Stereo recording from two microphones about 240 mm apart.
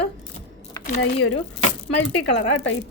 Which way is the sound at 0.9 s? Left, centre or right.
Left.